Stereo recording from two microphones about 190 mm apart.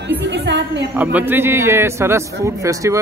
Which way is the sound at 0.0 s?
65° right (ahead or behind).